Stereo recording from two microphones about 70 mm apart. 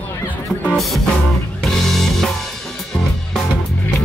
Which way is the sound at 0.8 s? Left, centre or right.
Centre.